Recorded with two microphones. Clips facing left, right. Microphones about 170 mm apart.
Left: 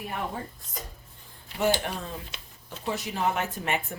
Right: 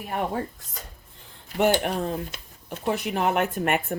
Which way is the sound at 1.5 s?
65° right (ahead or behind).